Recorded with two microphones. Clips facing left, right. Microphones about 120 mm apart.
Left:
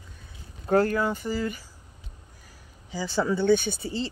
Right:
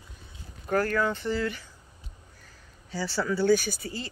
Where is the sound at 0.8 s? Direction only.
10° left (ahead or behind).